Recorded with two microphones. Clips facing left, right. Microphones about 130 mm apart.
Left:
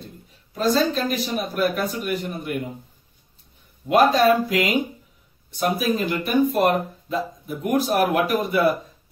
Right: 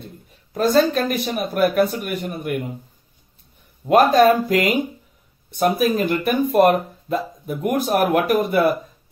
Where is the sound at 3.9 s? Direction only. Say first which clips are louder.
Right 3 dB; 45° right (ahead or behind).